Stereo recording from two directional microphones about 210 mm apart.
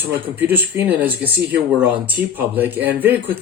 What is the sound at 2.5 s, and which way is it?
Speech, 10° right (ahead or behind).